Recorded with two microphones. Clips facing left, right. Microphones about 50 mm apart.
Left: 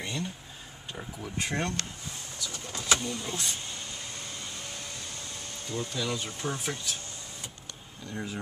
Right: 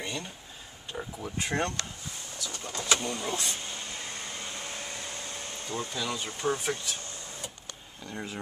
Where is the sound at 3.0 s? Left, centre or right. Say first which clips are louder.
Right 2 dB; right.